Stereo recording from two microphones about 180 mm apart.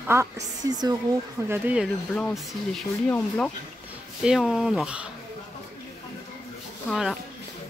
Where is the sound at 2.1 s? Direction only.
5° left (ahead or behind).